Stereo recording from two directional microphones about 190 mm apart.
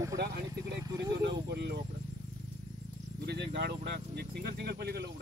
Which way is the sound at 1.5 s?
60° right (ahead or behind).